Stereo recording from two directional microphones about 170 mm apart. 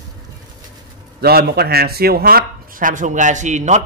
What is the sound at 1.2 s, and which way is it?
Speech, 65° right (ahead or behind).